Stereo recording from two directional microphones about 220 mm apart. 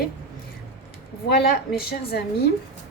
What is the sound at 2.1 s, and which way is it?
Speech, 45° left (ahead or behind).